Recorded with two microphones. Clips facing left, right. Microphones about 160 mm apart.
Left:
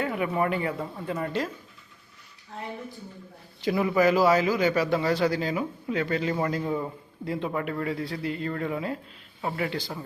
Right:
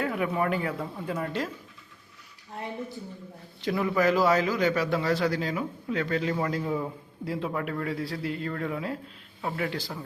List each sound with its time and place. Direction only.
0.0 s a man's voice: centre (ahead or behind)
3.6 s a man's voice: 5° left (ahead or behind)